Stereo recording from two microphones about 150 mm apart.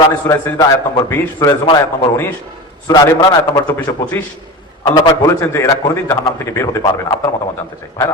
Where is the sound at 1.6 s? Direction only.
35° left (ahead or behind); by 8.1 s 20° left (ahead or behind).